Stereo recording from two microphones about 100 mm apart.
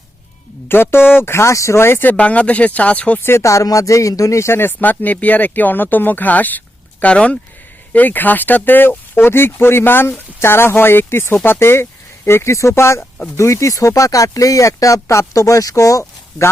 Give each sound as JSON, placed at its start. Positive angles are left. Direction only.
{"t": 0.7, "sound": "speech", "side_deg": 25}